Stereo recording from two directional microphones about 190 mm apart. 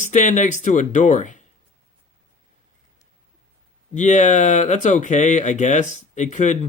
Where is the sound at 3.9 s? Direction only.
40° left (ahead or behind).